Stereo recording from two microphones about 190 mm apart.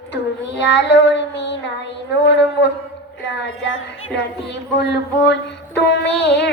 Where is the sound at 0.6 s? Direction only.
65° left (ahead or behind).